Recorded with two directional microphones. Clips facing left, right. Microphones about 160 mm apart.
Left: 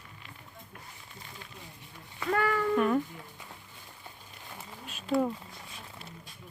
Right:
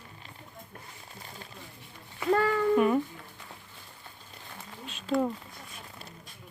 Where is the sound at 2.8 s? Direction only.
5° right (ahead or behind).